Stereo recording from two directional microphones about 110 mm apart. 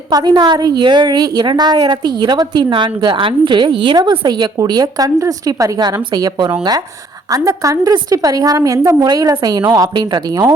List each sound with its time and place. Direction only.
0.1 s a woman's voice: 40° right (ahead or behind)
7.4 s a woman's voice: 30° right (ahead or behind)